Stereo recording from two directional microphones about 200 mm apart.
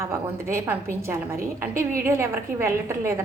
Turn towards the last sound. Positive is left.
turn(degrees=-15)  # may be behind; listen again after turning